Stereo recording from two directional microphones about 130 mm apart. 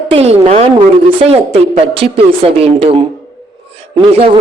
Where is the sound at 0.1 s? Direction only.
50° right (ahead or behind).